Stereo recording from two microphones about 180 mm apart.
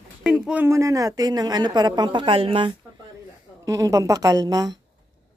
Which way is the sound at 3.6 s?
20° right (ahead or behind).